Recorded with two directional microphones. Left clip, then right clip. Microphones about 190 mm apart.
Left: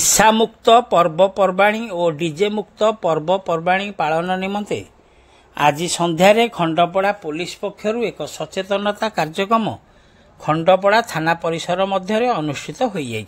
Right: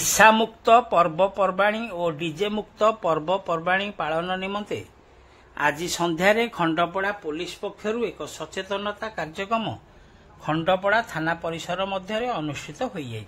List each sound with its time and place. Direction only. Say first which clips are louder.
0.2 s speech: left 1 dB; 20° left (ahead or behind)